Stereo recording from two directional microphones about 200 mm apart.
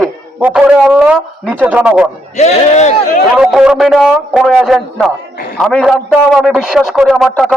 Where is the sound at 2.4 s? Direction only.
35° left (ahead or behind).